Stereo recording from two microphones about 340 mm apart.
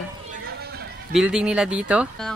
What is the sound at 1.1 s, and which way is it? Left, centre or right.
Speech, centre.